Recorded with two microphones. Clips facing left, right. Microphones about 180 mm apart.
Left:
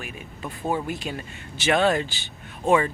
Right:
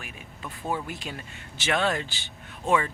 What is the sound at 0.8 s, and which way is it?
Speech, 5° left (ahead or behind).